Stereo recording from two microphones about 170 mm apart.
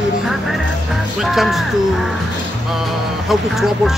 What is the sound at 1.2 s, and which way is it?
Speech, centre (ahead or behind).